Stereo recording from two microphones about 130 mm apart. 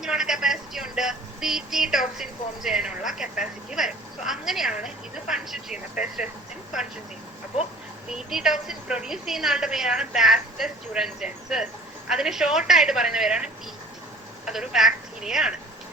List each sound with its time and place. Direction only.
0.0 s a woman's voice: 5° right (ahead or behind)
8.1 s a woman's voice: 5° right (ahead or behind)